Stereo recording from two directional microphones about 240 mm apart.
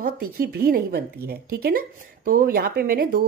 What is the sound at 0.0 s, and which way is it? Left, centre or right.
A woman's voice, right.